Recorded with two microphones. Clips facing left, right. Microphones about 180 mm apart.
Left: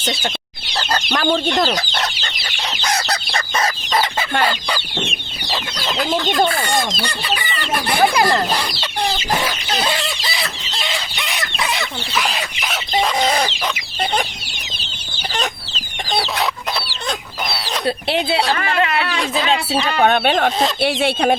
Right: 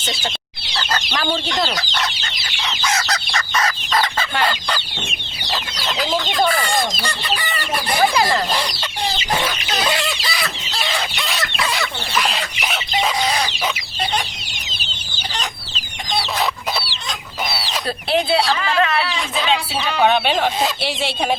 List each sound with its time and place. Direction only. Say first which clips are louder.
0.7 s chicken: left 3 dB; 40° left (ahead or behind); by 4.3 s 25° left (ahead or behind)
5.7 s chicken: left 2 dB; 55° left (ahead or behind)
10.2 s fowl: even; 25° left (ahead or behind)
11.3 s chicken: left 2 dB; 20° left (ahead or behind)
12.1 s chicken: even; 5° left (ahead or behind)
13.1 s chicken: left 3 dB; 50° left (ahead or behind)
19.1 s speech: left 2 dB; 70° left (ahead or behind)